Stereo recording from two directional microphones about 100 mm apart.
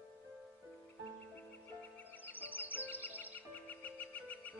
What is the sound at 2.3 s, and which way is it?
Music, 20° left (ahead or behind).